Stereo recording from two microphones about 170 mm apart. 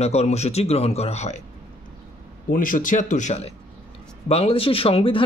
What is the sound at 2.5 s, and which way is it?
Speech, 50° left (ahead or behind).